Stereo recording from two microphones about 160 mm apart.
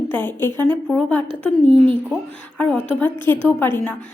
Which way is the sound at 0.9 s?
5° left (ahead or behind).